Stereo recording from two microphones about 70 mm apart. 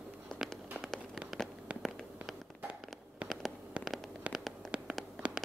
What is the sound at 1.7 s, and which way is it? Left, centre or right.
Fireworks, centre.